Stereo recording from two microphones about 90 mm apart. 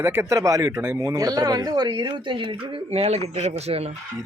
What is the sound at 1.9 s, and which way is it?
Speech, 65° right (ahead or behind).